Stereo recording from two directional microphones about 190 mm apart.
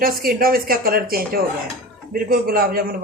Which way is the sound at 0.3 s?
50° right (ahead or behind).